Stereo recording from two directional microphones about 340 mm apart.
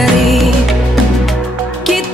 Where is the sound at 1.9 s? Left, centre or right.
Centre.